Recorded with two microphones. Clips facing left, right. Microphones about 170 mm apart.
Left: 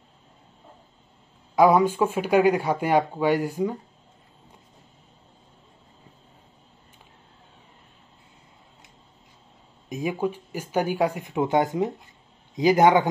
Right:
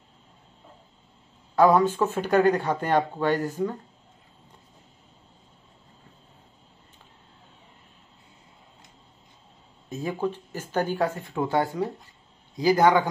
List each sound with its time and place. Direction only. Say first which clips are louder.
1.5 s speech: left 1 dB; 10° left (ahead or behind)
9.8 s a man's voice: left 2 dB; 15° left (ahead or behind)